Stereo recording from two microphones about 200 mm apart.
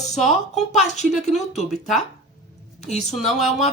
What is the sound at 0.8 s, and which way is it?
Speech, 35° left (ahead or behind).